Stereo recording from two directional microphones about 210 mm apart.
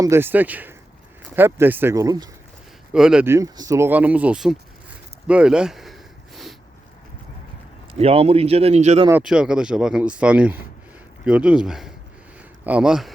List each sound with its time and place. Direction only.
0.0 s speech: 10° right (ahead or behind)
2.9 s speech: 5° right (ahead or behind)
5.3 s a sound: 5° right (ahead or behind)
7.9 s speech: 30° right (ahead or behind)
9.2 s speech: 5° right (ahead or behind)